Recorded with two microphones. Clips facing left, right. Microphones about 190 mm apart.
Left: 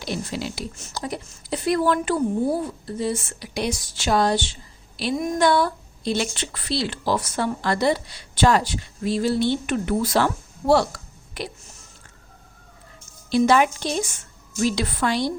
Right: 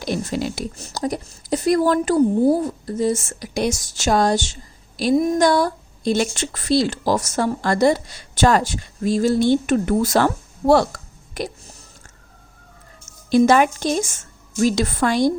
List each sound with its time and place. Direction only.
0.0 s a woman's voice: 50° right (ahead or behind)
13.3 s a woman's voice: 50° right (ahead or behind)